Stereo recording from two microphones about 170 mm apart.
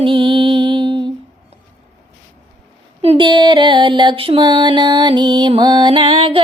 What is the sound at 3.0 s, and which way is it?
Music, 30° right (ahead or behind).